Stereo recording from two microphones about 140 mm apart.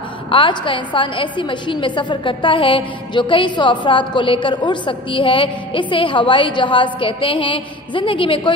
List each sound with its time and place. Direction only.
0.3 s a woman's voice: 35° left (ahead or behind)